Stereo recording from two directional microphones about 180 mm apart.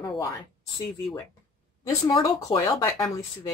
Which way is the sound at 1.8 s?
20° left (ahead or behind).